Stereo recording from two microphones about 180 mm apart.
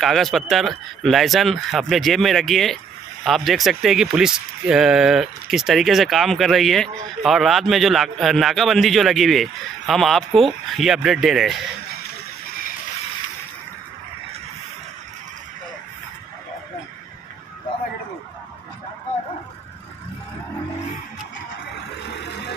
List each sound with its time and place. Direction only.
0.0 s speech: centre (ahead or behind)
22.0 s vehicle: 70° left (ahead or behind)